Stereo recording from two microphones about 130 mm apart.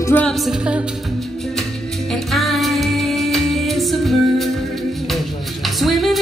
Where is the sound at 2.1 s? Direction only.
Centre (ahead or behind).